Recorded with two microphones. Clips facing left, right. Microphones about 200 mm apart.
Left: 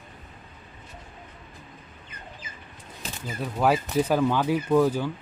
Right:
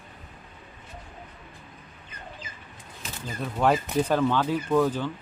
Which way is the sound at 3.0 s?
35° left (ahead or behind).